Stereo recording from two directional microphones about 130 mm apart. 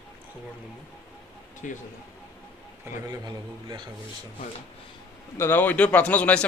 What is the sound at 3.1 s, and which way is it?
Speech, 35° right (ahead or behind).